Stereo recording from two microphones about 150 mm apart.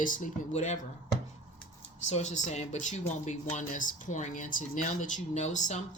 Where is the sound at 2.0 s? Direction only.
50° left (ahead or behind).